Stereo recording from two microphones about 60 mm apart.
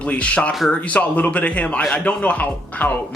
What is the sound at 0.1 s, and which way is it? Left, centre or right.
Speech, left.